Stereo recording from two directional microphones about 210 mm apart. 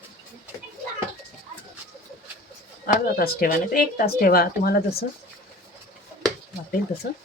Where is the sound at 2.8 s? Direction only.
45° left (ahead or behind).